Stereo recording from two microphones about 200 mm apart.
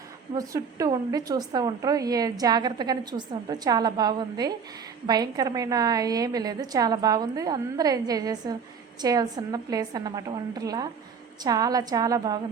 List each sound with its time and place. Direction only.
0.3 s a woman's voice: 15° right (ahead or behind)